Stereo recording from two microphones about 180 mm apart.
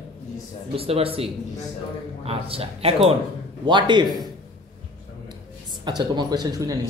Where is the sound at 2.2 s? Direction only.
30° right (ahead or behind).